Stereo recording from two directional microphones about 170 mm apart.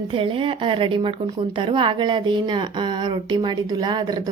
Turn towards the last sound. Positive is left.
turn(degrees=-25)  # may be behind; listen again after turning